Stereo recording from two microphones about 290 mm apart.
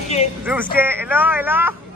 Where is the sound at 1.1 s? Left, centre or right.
Centre.